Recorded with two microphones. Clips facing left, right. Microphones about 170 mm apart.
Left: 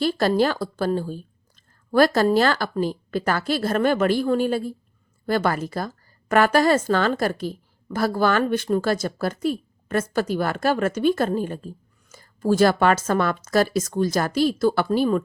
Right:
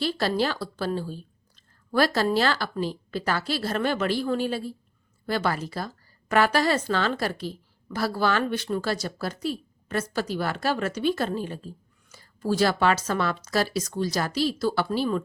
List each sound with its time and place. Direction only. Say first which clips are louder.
0.0 s a woman's voice: left 5 dB; 45° left (ahead or behind)